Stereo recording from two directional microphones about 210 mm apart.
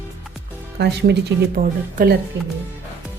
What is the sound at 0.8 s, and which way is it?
Speech, 55° right (ahead or behind).